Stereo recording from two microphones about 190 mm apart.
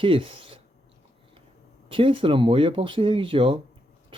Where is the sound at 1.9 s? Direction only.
30° right (ahead or behind).